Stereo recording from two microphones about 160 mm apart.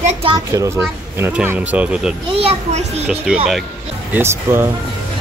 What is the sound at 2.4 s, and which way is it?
Speech, 40° right (ahead or behind).